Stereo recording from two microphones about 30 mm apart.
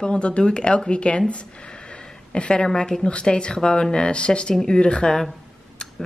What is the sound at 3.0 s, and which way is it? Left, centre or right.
A woman's voice, left.